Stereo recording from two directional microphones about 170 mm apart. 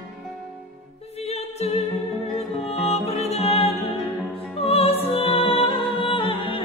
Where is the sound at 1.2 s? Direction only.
40° left (ahead or behind).